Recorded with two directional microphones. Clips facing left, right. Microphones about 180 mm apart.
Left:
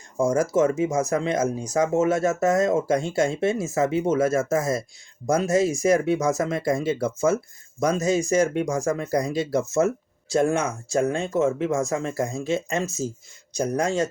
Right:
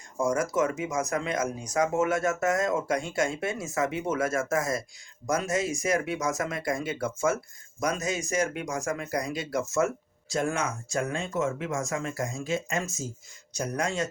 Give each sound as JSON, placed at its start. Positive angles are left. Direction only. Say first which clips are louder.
{"t": 0.2, "sound": "speech", "louder": "left 6 dB", "side_deg": 30}